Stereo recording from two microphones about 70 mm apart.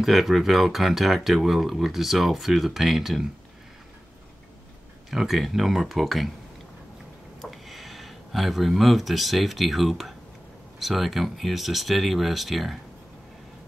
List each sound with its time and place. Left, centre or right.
0.0 s speech: centre
5.1 s speech: centre
7.5 s speech: centre